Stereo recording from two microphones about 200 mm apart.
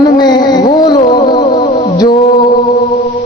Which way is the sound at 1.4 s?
25° left (ahead or behind).